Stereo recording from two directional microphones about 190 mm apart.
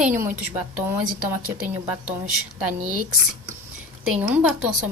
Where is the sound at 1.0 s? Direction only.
45° right (ahead or behind).